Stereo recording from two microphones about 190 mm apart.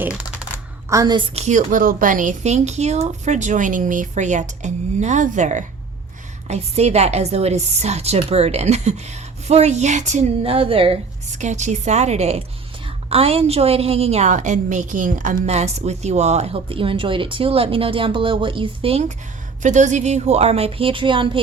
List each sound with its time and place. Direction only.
0.0 s typing: 5° right (ahead or behind)
0.9 s a woman's voice: 20° right (ahead or behind)